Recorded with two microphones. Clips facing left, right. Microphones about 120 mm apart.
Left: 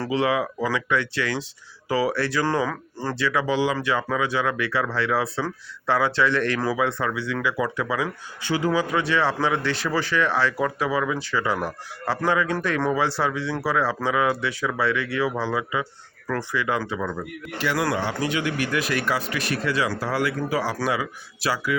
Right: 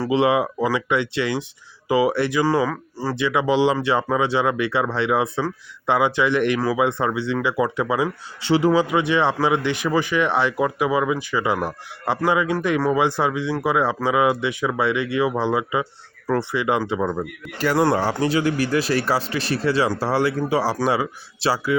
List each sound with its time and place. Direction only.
0.1 s speech: 20° right (ahead or behind)
2.4 s speech: 10° right (ahead or behind)
3.2 s speech: 20° right (ahead or behind)
17.9 s speech: 40° right (ahead or behind)